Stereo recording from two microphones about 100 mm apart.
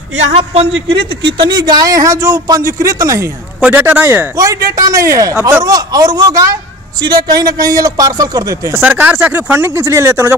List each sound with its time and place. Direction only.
0.4 s speech: 60° right (ahead or behind); by 3.3 s 35° right (ahead or behind)
3.6 s speech: 20° right (ahead or behind)
5.6 s speech: 40° right (ahead or behind)
8.8 s speech: 15° right (ahead or behind)